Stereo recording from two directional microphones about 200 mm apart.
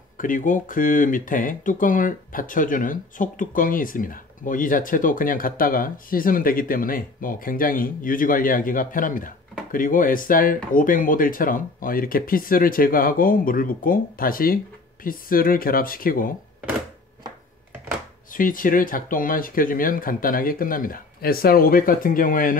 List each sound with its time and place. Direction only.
0.2 s speech: 40° left (ahead or behind)
18.3 s speech: 45° left (ahead or behind)